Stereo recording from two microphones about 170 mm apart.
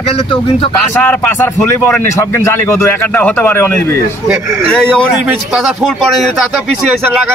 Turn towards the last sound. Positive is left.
turn(degrees=0)  # may be behind; listen again after turning